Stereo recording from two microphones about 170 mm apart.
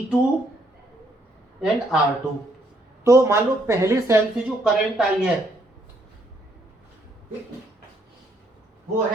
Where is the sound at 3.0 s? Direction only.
15° right (ahead or behind).